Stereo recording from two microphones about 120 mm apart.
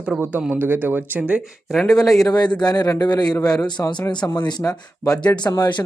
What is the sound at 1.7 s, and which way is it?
Speech, centre (ahead or behind).